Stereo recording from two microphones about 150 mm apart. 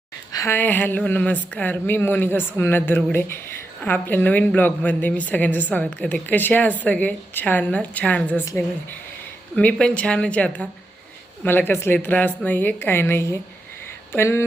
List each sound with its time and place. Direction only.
0.3 s speech: 15° left (ahead or behind)
9.6 s speech: 5° left (ahead or behind)